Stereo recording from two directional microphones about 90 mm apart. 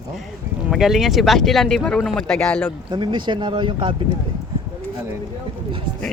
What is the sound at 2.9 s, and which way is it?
Speech, 60° right (ahead or behind).